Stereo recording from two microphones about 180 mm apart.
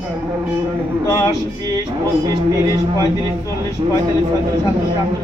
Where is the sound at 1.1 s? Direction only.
20° left (ahead or behind).